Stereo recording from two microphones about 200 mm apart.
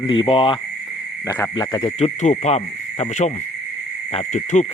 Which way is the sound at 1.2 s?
15° left (ahead or behind).